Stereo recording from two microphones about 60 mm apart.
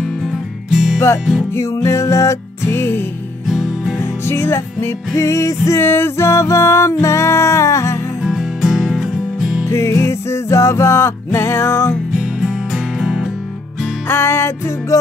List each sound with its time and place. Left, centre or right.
0.7 s music: centre
1.5 s music: left
3.4 s music: centre
4.3 s music: left
5.7 s music: left
8.2 s music: centre
9.7 s music: left
12.4 s music: centre
14.0 s music: left